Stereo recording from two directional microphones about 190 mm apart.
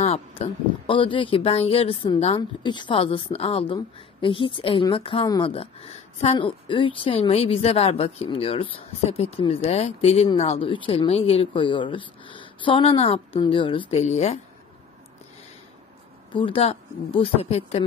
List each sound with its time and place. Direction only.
0.0 s speech: 30° left (ahead or behind)
16.3 s speech: 25° left (ahead or behind)